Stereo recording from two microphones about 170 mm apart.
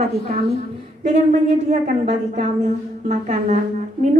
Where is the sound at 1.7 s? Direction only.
45° right (ahead or behind).